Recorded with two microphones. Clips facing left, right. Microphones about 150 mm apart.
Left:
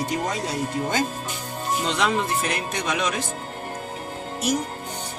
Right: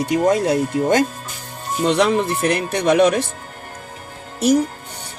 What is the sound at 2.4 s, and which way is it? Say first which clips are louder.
Speech: right 9 dB; 60° right (ahead or behind).